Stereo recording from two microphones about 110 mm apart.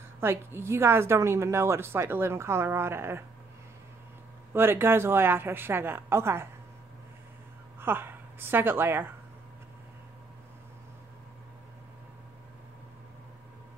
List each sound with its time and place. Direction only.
0.2 s a woman's voice: 20° right (ahead or behind)
4.6 s a woman's voice: 20° right (ahead or behind)
7.8 s a woman's voice: 20° right (ahead or behind)